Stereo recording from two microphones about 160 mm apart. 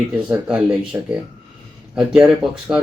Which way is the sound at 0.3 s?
5° right (ahead or behind).